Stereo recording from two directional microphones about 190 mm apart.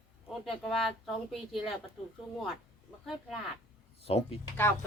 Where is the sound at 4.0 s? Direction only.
30° left (ahead or behind).